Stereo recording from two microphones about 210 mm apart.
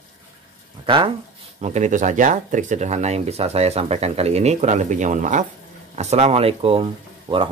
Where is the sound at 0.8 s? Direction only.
25° right (ahead or behind).